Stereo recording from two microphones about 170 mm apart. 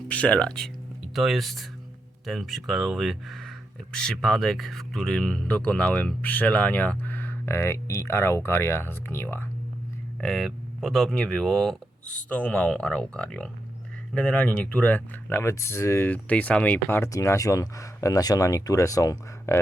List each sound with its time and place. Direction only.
0.1 s speech: 5° left (ahead or behind)
10.2 s speech: centre (ahead or behind); by 19.5 s 20° left (ahead or behind)